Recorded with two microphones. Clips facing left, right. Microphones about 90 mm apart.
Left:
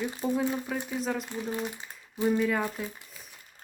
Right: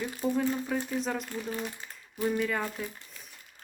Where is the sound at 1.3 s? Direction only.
20° left (ahead or behind).